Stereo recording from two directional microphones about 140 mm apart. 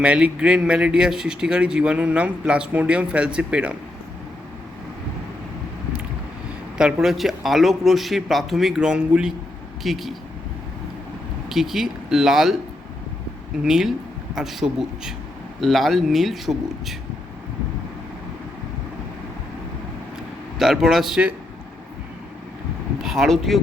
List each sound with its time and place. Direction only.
0.0 s speech: 10° right (ahead or behind)
6.7 s speech: 5° right (ahead or behind)
11.4 s speech: centre (ahead or behind)
13.7 s speech: 5° right (ahead or behind)
20.6 s speech: centre (ahead or behind)
23.0 s speech: centre (ahead or behind)